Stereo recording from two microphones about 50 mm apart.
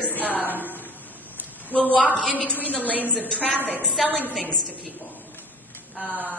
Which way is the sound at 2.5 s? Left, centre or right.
Left.